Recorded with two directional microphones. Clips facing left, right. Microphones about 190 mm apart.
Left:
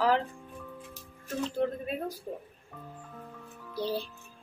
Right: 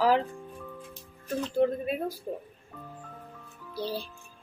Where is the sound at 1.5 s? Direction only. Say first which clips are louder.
Right 6 dB; 10° right (ahead or behind).